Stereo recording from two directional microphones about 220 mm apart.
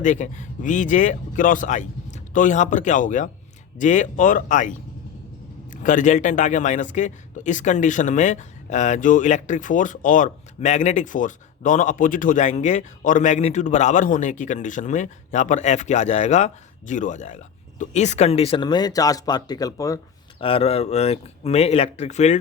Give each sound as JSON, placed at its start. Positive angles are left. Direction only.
{"t": 0.0, "sound": "a man's voice", "side_deg": 35}
{"t": 20.4, "sound": "speech", "side_deg": 25}